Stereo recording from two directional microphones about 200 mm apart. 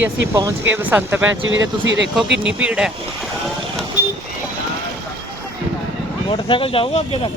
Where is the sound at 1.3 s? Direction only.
75° right (ahead or behind).